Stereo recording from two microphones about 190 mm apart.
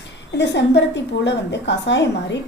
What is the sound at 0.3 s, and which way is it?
A woman's voice, 65° left (ahead or behind).